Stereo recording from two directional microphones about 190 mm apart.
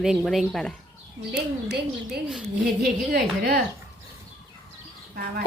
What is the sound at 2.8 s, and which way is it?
Speech, 55° right (ahead or behind).